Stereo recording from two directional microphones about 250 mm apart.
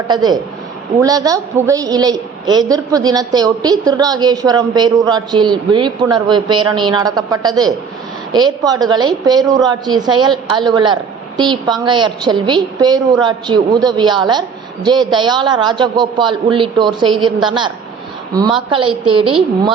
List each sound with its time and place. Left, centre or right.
0.1 s a woman's voice: centre
18.7 s a man's voice: centre